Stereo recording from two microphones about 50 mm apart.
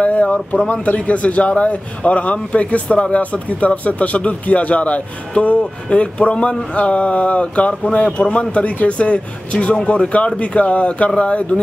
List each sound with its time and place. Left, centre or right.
0.0 s speech: left